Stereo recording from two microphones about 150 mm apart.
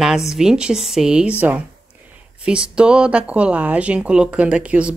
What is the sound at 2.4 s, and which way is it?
Speech, 5° right (ahead or behind).